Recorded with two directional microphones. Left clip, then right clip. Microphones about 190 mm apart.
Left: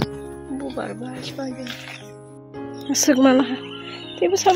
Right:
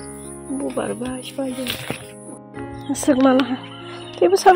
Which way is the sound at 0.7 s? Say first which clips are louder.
Right 4 dB; 20° right (ahead or behind).